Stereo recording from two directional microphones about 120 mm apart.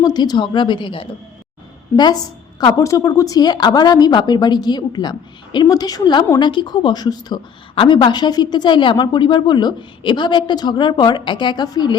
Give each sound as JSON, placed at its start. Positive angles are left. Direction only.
{"t": 0.0, "sound": "a woman's voice", "side_deg": 35}
{"t": 2.6, "sound": "a woman's voice", "side_deg": 30}